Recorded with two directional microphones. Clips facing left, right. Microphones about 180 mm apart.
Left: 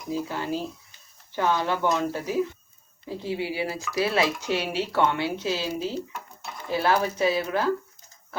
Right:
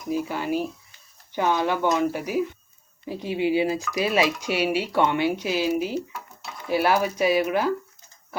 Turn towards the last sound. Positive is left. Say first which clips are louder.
# right 2 dB
turn(degrees=-15)  # may be behind; listen again after turning